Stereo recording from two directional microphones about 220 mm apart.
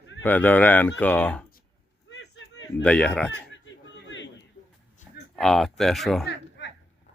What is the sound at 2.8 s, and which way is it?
Speech, 5° left (ahead or behind).